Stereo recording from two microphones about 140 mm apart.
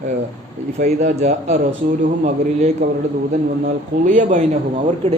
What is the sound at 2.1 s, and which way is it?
A man's voice, 70° right (ahead or behind).